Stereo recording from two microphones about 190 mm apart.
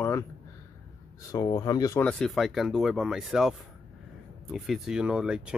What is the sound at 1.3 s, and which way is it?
Speech, 20° left (ahead or behind).